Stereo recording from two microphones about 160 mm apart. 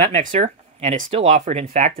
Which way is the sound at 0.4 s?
45° right (ahead or behind).